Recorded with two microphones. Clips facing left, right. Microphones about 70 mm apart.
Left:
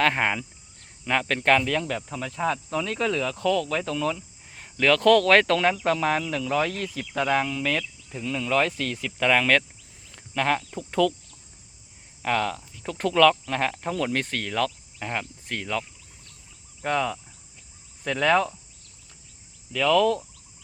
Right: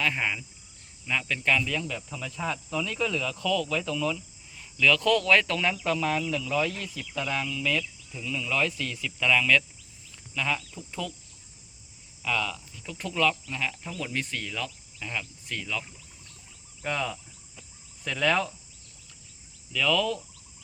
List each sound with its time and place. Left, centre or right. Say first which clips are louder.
0.0 s speech: left 6 dB; left
12.2 s speech: left 5 dB; left
16.8 s speech: left 5 dB; left
19.7 s speech: left 6 dB; left